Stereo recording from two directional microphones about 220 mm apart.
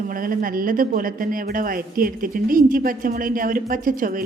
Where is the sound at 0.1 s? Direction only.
40° right (ahead or behind).